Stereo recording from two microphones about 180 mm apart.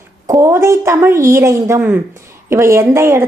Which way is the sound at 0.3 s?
15° right (ahead or behind).